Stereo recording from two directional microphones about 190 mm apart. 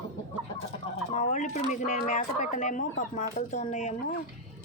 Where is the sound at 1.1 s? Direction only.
40° left (ahead or behind).